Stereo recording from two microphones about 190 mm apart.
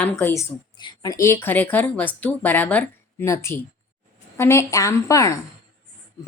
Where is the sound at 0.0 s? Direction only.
10° left (ahead or behind).